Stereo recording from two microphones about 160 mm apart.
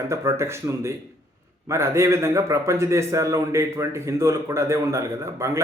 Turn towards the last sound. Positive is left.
turn(degrees=-20)  # may be behind; listen again after turning